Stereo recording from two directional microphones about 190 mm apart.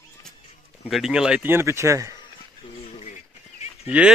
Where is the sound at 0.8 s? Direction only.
5° right (ahead or behind).